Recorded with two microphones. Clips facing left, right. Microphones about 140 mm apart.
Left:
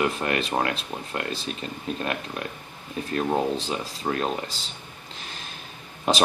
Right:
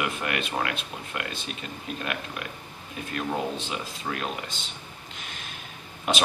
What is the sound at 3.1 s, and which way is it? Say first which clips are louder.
Speech: left 5 dB; 35° left (ahead or behind).